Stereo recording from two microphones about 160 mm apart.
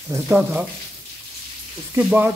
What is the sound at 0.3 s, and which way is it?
Speech, 5° right (ahead or behind).